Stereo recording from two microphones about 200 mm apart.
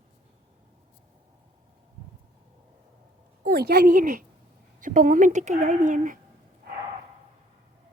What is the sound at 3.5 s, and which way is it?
A woman's voice, 50° right (ahead or behind).